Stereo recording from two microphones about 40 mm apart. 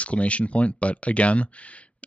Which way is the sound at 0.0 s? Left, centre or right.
Left.